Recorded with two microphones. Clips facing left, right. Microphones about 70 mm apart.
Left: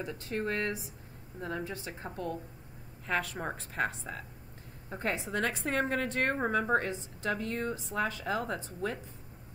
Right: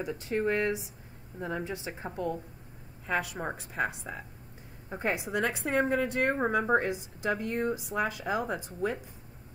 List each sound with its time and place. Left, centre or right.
0.0 s a woman's voice: centre